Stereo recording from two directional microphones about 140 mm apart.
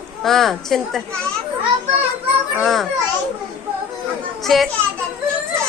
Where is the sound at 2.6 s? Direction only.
Centre (ahead or behind).